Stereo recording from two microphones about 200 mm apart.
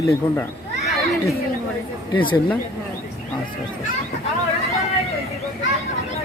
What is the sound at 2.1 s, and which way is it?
Speech, 25° left (ahead or behind).